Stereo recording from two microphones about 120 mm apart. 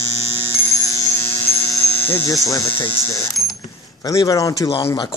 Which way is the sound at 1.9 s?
15° left (ahead or behind).